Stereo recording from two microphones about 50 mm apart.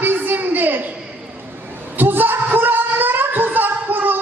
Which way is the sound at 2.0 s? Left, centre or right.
Right.